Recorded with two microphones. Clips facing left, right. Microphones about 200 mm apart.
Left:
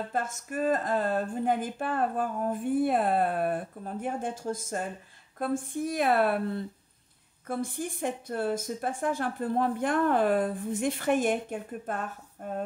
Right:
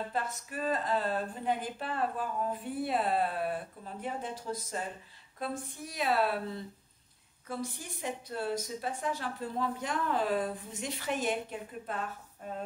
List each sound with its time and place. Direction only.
0.1 s a woman's voice: 45° left (ahead or behind)